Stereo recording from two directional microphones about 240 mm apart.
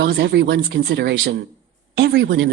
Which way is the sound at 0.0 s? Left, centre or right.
Right.